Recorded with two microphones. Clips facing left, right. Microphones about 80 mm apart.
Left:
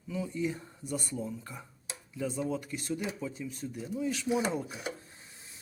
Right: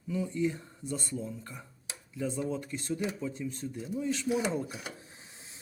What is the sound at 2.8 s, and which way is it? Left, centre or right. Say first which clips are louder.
Speech: right 1 dB; centre.